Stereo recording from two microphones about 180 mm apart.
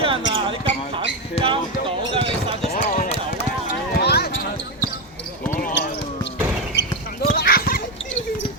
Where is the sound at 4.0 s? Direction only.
65° left (ahead or behind).